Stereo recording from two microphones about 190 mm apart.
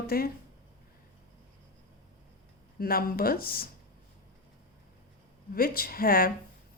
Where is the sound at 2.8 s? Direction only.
50° left (ahead or behind).